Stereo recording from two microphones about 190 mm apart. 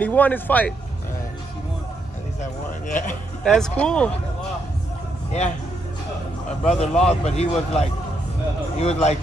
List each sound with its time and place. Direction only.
0.0 s speech: 10° left (ahead or behind)
2.9 s a man's voice: 40° left (ahead or behind)
3.4 s speech: 5° left (ahead or behind)
6.6 s a man's voice: 35° left (ahead or behind)